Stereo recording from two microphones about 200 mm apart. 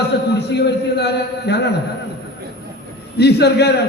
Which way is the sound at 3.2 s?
55° left (ahead or behind).